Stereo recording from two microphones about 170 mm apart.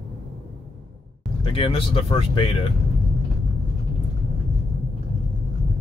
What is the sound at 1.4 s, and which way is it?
Speech, 35° left (ahead or behind).